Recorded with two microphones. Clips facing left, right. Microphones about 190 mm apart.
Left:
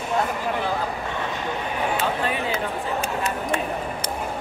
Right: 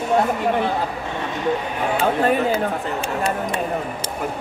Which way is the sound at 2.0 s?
45° right (ahead or behind).